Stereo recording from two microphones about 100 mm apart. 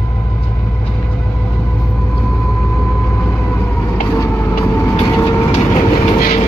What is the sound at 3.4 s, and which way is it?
Vehicle, 20° left (ahead or behind).